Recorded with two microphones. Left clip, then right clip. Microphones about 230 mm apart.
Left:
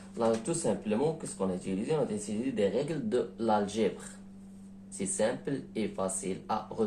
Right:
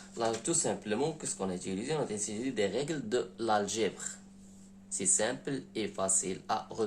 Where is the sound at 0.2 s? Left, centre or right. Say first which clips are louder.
Left 2 dB; right.